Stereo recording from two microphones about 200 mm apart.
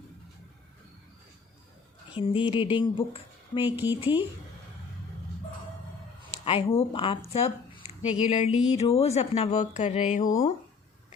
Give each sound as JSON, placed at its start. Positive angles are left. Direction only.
{"t": 2.1, "sound": "speech", "side_deg": 25}
{"t": 3.6, "sound": "speech", "side_deg": -10}
{"t": 6.4, "sound": "speech", "side_deg": 30}
{"t": 7.3, "sound": "a sound", "side_deg": 30}
{"t": 8.2, "sound": "speech", "side_deg": 30}